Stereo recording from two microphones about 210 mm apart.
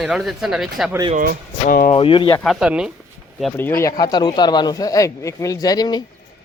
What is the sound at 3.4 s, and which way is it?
Speech, 5° left (ahead or behind).